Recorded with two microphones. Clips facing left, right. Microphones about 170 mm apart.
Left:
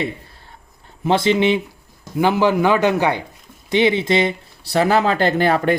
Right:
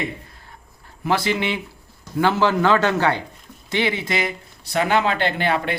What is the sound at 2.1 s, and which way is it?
A man's voice, 15° left (ahead or behind).